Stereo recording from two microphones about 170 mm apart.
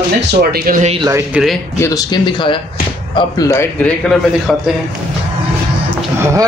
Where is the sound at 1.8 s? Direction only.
20° left (ahead or behind); by 4.5 s 5° left (ahead or behind).